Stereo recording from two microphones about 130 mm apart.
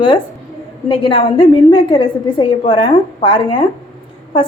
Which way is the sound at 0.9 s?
40° left (ahead or behind).